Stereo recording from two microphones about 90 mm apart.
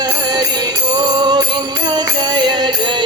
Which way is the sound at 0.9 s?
55° right (ahead or behind).